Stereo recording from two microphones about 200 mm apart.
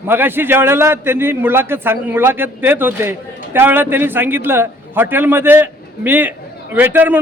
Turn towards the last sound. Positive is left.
turn(degrees=-10)  # may be behind; listen again after turning